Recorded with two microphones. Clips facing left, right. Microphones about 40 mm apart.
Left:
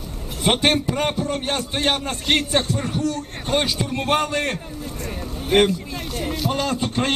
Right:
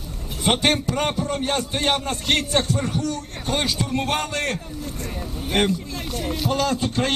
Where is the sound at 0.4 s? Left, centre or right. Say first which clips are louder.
Left 1 dB; centre.